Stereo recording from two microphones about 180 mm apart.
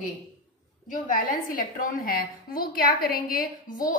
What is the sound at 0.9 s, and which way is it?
A woman's voice, 50° left (ahead or behind).